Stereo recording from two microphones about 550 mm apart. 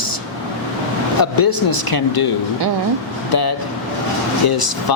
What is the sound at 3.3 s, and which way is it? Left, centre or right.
Vehicle, left.